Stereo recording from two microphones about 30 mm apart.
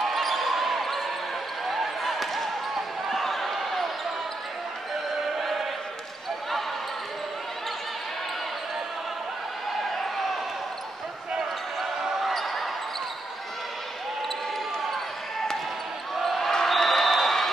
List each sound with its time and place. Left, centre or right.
0.0 s basketball bounce: centre
5.4 s choir: centre
12.0 s basketball bounce: centre
16.2 s basketball bounce: centre
16.6 s a sound: centre